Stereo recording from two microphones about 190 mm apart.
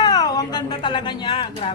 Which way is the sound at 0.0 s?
20° left (ahead or behind).